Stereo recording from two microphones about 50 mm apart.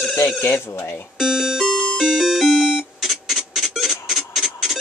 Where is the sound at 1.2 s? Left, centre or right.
Centre.